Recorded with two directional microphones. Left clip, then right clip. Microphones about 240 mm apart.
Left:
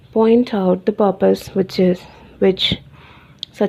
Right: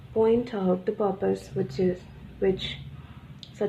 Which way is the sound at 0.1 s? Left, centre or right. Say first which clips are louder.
Left 9 dB; left.